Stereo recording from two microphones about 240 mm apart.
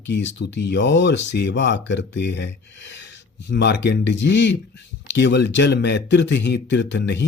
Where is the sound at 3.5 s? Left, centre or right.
Left.